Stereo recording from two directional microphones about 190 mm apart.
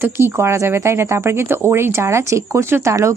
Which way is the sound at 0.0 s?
10° right (ahead or behind).